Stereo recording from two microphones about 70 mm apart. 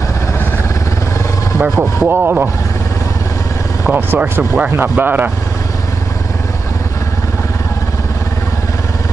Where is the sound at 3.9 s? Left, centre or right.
Right.